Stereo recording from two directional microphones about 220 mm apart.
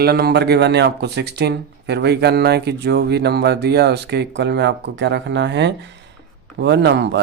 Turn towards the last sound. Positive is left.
turn(degrees=-50)  # may be behind; listen again after turning